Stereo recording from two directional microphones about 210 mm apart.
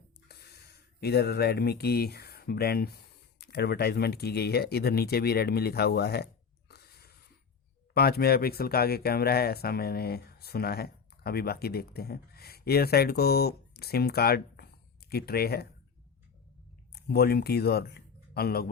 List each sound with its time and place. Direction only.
0.3 s speech: 50° left (ahead or behind)
6.7 s a sound: 50° left (ahead or behind)
7.9 s speech: 45° left (ahead or behind)
16.9 s speech: 50° left (ahead or behind)